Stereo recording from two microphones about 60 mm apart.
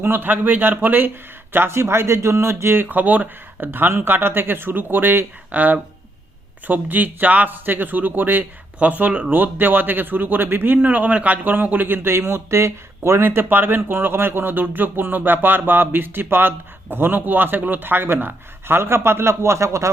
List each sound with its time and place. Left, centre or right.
0.0 s speech: right
1.5 s speech: right
2.9 s speech: right
13.2 s speech: right